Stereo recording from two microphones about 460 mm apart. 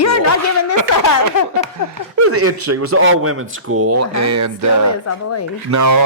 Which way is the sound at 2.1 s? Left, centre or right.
Right.